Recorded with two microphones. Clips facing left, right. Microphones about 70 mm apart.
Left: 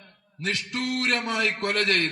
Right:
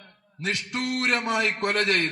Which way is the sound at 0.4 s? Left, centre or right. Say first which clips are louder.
Even; right.